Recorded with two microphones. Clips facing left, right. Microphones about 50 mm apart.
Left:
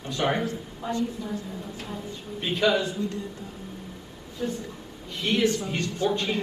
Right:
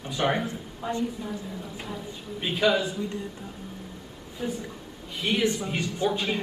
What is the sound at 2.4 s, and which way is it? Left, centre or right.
Speech, centre.